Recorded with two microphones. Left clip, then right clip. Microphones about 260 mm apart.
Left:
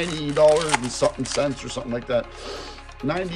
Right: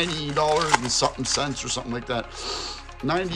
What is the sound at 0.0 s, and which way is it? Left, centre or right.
Speech, centre.